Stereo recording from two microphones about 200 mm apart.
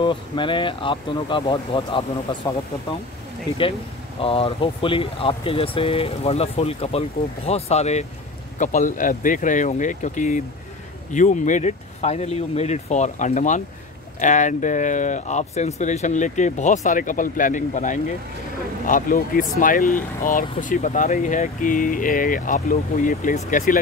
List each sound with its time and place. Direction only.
0.0 s speech: 25° left (ahead or behind)
4.2 s speech: 30° left (ahead or behind)